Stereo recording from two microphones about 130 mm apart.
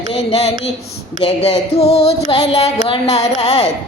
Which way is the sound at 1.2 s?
55° left (ahead or behind).